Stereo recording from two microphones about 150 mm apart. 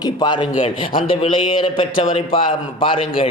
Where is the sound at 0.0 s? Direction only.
30° left (ahead or behind).